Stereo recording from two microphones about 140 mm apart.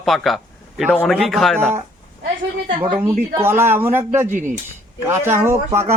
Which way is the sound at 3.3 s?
15° right (ahead or behind).